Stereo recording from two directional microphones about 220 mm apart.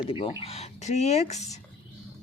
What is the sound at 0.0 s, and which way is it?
Speech, 25° left (ahead or behind).